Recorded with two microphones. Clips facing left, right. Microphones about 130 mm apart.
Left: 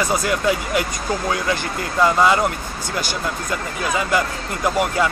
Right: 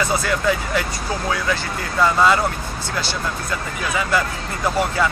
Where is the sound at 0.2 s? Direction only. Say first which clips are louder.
Left 1 dB; 15° left (ahead or behind).